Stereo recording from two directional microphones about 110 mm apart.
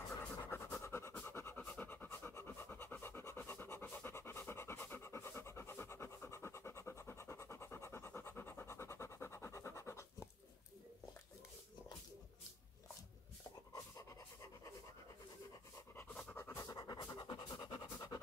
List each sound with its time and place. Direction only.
0.5 s pant: 25° left (ahead or behind)
13.7 s pant: 30° left (ahead or behind)
16.3 s pant: 25° left (ahead or behind)